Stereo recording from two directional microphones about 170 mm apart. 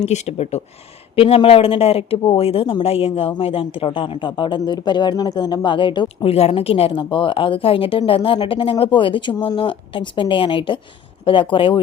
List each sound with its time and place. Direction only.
0.0 s speech: 40° left (ahead or behind)